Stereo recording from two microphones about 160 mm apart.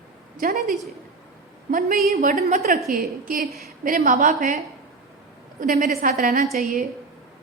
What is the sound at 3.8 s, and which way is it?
Speech, 55° right (ahead or behind).